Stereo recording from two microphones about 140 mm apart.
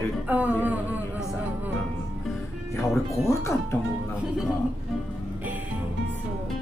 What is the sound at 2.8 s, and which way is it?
Speech, 20° left (ahead or behind).